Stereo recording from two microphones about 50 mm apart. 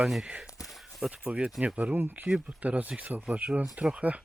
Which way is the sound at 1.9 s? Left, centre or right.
Right.